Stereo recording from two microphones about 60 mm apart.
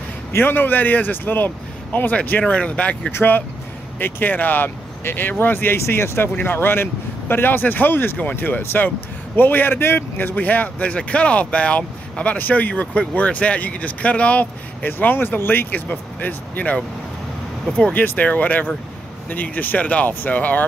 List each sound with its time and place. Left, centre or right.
0.3 s speech: left; by 3.1 s centre
3.1 s speech: left
17.9 s speech: left